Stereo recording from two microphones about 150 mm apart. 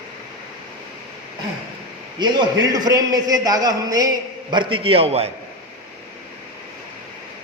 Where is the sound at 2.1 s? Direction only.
30° right (ahead or behind).